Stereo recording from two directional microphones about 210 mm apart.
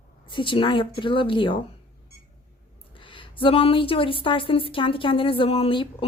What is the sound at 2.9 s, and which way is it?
Speech, 25° left (ahead or behind).